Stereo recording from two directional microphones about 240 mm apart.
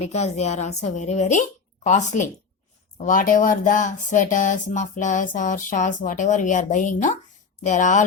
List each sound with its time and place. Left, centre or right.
0.0 s a woman's voice: left